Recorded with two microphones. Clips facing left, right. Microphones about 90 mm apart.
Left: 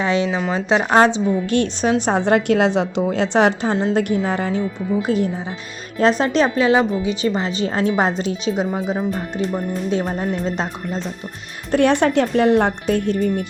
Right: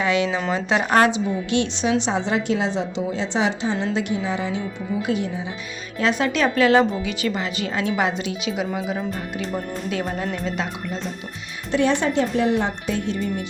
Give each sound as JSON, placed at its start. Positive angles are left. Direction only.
{"t": 0.0, "sound": "speech", "side_deg": 25}
{"t": 0.3, "sound": "speech", "side_deg": 10}
{"t": 0.5, "sound": "speech", "side_deg": 20}
{"t": 1.5, "sound": "a woman's voice", "side_deg": 45}
{"t": 6.5, "sound": "speech", "side_deg": 20}
{"t": 10.4, "sound": "speech", "side_deg": 35}
{"t": 11.7, "sound": "a woman's voice", "side_deg": 60}